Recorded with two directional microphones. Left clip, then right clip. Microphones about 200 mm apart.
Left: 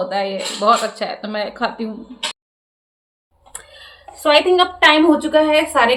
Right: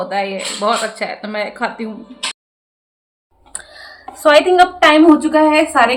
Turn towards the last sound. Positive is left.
turn(degrees=0)  # may be behind; listen again after turning